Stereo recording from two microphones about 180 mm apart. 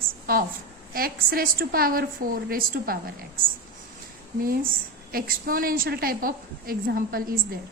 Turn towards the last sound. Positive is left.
turn(degrees=-55)  # may be behind; listen again after turning